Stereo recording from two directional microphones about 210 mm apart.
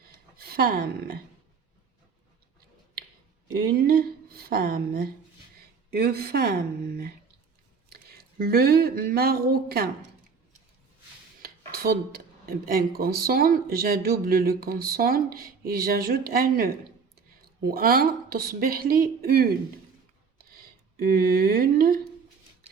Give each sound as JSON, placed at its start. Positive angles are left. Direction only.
{"t": 0.0, "sound": "a sound", "side_deg": -45}
{"t": 3.7, "sound": "speech", "side_deg": -45}
{"t": 11.4, "sound": "speech", "side_deg": -45}
{"t": 20.9, "sound": "speech", "side_deg": -45}